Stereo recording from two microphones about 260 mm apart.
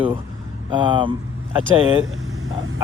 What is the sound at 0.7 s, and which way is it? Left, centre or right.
Speech, centre.